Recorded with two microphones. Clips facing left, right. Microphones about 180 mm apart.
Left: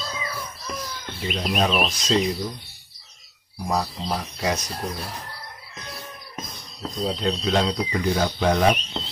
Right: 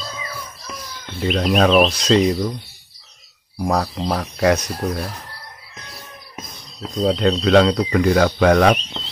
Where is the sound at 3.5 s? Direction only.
55° right (ahead or behind).